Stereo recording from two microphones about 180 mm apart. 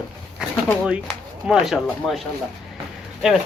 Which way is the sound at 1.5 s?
5° right (ahead or behind).